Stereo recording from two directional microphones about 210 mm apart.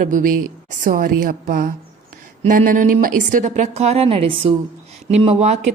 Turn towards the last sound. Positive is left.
turn(degrees=-30)  # may be behind; listen again after turning